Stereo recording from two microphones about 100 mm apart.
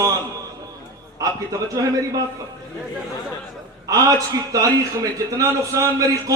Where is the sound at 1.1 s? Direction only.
35° right (ahead or behind).